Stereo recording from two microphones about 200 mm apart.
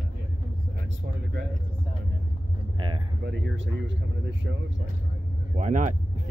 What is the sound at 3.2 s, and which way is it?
Speech, 70° right (ahead or behind).